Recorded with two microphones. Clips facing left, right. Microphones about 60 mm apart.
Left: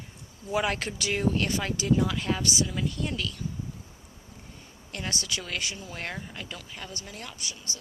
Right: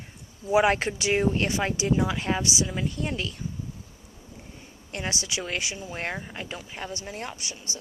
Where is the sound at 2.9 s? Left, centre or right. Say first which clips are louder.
Right 2 dB; right.